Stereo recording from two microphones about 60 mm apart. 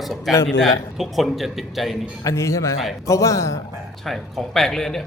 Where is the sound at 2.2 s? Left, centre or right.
Left.